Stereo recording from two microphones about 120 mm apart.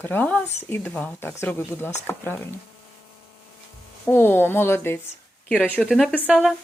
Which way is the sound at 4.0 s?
15° left (ahead or behind).